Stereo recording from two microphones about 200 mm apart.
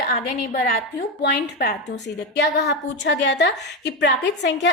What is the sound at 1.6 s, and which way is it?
A woman's voice, 55° left (ahead or behind).